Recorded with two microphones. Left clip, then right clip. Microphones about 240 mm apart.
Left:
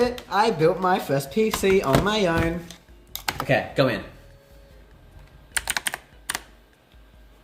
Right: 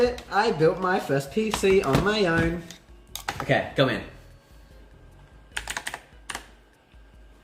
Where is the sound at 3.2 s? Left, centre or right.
Left.